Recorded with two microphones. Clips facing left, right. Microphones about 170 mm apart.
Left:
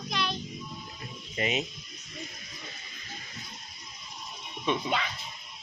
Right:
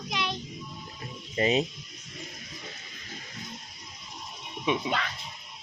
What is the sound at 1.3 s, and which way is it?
Speech, 35° right (ahead or behind).